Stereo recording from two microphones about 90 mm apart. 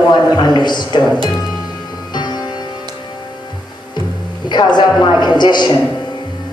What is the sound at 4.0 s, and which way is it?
Music, 55° left (ahead or behind).